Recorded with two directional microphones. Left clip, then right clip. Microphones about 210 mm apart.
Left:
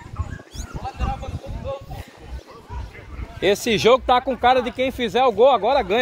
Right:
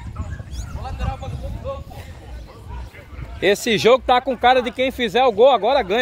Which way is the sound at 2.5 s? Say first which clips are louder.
Left 2 dB; 55° right (ahead or behind).